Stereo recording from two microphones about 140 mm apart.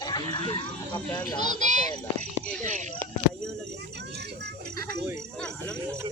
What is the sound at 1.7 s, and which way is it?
Speech, 55° right (ahead or behind).